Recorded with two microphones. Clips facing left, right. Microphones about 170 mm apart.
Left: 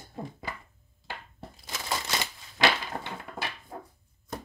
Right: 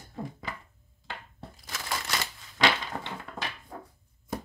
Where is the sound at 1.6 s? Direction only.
20° left (ahead or behind).